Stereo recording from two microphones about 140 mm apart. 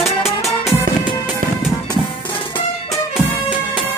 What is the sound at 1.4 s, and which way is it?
Music, 80° right.